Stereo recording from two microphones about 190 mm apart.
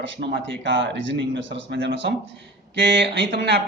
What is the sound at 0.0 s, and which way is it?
Speech, 55° right (ahead or behind).